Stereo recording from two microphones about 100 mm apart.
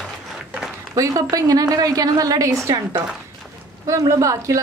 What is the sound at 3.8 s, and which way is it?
Speech, 30° right (ahead or behind).